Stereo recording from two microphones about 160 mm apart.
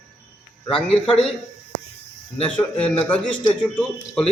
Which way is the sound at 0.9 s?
5° left (ahead or behind).